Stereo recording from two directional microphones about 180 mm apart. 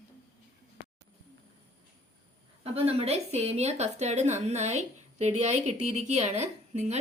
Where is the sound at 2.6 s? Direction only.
30° right (ahead or behind).